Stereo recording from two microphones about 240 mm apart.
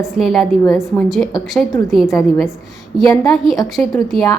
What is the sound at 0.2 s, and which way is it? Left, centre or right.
A woman's voice, centre.